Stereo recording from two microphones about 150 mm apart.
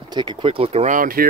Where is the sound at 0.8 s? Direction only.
65° right (ahead or behind).